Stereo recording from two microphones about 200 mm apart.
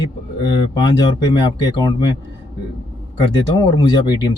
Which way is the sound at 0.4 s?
20° left (ahead or behind).